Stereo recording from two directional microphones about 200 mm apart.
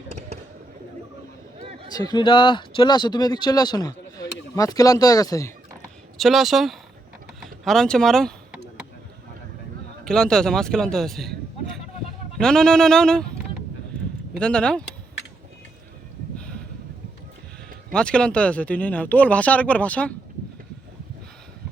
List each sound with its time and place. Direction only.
0.1 s a sound: 35° right (ahead or behind)
1.5 s a sound: 30° right (ahead or behind)
1.9 s speech: 20° left (ahead or behind)
6.1 s a man's voice: centre (ahead or behind)
10.0 s a man's voice: 5° left (ahead or behind)
12.4 s a man's voice: 5° left (ahead or behind)
14.3 s a man's voice: 5° left (ahead or behind)
17.9 s speech: 5° left (ahead or behind)